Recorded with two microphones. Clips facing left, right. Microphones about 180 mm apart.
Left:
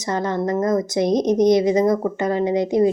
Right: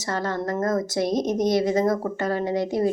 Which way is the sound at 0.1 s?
15° left (ahead or behind).